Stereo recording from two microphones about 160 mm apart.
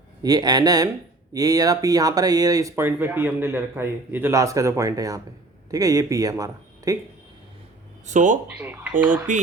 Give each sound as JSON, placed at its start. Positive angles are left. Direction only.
{"t": 0.2, "sound": "speech", "side_deg": -25}
{"t": 8.0, "sound": "speech", "side_deg": -50}
{"t": 8.4, "sound": "speech", "side_deg": -10}